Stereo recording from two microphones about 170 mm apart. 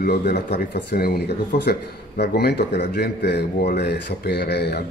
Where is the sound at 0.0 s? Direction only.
70° left (ahead or behind).